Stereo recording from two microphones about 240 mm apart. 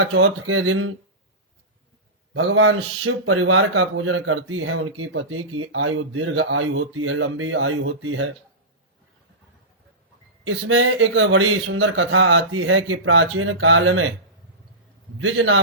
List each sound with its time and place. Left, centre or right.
0.0 s speech: right
2.3 s speech: right
10.4 s speech: right
15.2 s speech: right